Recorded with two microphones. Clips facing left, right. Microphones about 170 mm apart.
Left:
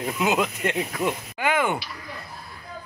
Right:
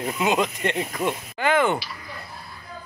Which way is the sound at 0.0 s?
Centre (ahead or behind).